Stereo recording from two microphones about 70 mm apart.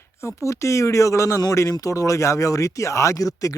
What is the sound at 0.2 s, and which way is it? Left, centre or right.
A man's voice, left.